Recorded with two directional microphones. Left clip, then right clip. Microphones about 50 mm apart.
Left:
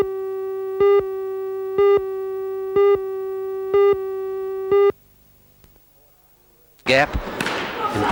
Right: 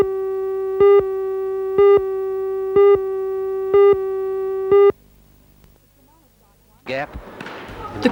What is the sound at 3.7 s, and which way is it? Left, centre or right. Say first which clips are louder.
Music: right 3 dB; left.